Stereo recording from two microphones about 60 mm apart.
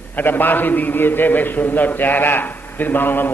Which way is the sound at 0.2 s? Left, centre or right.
Left.